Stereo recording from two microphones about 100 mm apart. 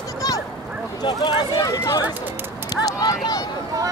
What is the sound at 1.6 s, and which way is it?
Run, 35° left (ahead or behind).